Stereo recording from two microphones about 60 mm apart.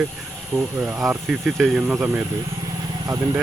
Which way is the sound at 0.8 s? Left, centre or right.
Centre.